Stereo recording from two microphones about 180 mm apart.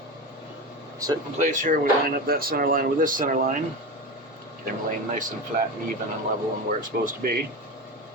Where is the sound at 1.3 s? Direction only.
45° right (ahead or behind).